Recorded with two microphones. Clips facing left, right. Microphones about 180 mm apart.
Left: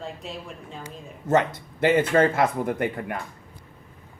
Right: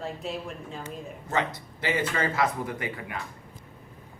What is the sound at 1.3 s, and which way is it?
Speech, 55° left (ahead or behind).